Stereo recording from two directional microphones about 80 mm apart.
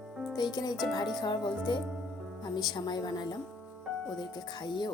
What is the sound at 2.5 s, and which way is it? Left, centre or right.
Speech, left.